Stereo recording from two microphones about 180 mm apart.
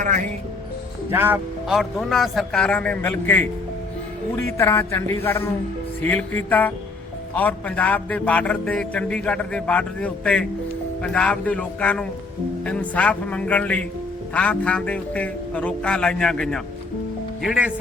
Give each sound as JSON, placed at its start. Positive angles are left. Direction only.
{"t": 1.1, "sound": "a man's voice", "side_deg": -10}
{"t": 4.4, "sound": "a man's voice", "side_deg": 15}